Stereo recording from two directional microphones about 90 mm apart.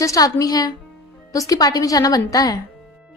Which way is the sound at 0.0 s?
40° left (ahead or behind).